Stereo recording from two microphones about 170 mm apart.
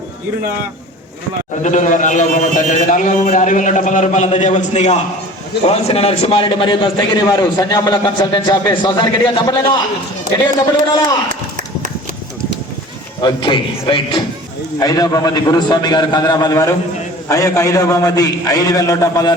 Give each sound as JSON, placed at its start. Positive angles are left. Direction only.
{"t": 1.6, "sound": "a man's voice", "side_deg": 45}
{"t": 13.2, "sound": "a man's voice", "side_deg": 30}